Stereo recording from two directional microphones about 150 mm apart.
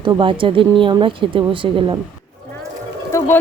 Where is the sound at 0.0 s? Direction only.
35° right (ahead or behind).